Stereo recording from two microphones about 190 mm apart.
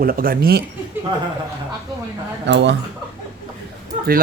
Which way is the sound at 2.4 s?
70° right (ahead or behind).